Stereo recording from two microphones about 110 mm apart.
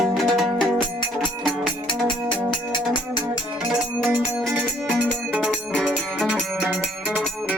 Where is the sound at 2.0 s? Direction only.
45° left (ahead or behind).